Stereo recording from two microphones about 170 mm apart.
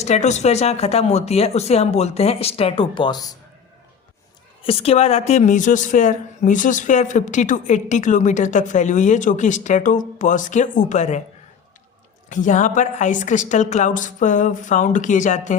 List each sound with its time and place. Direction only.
0.0 s speech: 40° left (ahead or behind); by 3.3 s 25° left (ahead or behind)
4.6 s a woman's voice: 35° left (ahead or behind)
12.3 s a woman's voice: 50° left (ahead or behind)